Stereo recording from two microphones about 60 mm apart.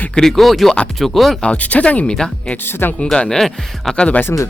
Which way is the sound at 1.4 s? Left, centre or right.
Left.